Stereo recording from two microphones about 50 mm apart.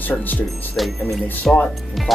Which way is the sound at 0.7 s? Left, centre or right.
Centre.